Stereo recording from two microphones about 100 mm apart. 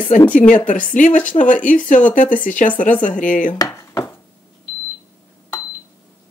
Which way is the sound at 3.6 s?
40° left (ahead or behind).